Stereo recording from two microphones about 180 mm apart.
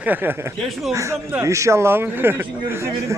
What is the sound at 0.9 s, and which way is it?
Speech, 15° right (ahead or behind).